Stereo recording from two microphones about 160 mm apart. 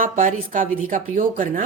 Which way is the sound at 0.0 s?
55° right (ahead or behind).